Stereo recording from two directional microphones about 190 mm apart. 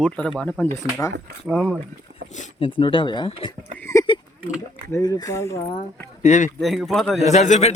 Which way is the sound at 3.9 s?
15° left (ahead or behind).